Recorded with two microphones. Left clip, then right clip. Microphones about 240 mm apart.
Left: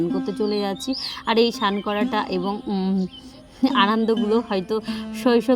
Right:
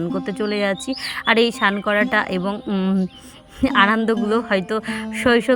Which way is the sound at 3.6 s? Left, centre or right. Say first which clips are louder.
Right 3 dB; centre.